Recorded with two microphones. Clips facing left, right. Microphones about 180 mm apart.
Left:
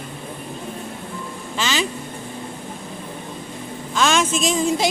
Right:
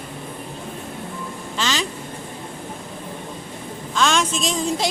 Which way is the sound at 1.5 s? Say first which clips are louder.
Left 2 dB; 5° left (ahead or behind).